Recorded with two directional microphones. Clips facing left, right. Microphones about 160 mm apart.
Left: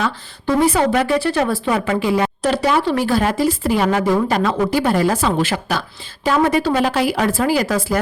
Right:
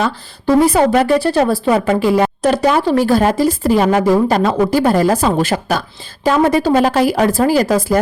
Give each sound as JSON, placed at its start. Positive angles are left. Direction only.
{"t": 0.0, "sound": "a woman's voice", "side_deg": -35}